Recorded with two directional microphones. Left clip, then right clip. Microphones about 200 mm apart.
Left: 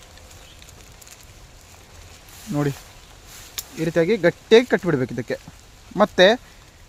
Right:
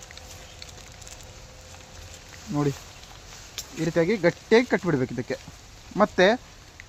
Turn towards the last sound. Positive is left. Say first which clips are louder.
# left 5 dB
turn(degrees=50)  # may be behind; listen again after turning